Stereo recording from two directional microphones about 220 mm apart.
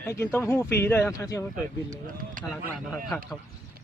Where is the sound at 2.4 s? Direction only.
40° right (ahead or behind).